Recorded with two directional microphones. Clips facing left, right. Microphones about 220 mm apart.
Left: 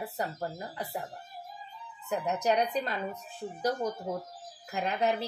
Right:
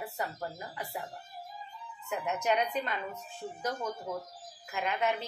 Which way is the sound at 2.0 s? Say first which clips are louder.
Left 3 dB; 35° left (ahead or behind).